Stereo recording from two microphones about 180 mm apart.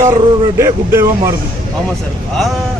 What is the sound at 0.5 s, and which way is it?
Speech, 15° right (ahead or behind).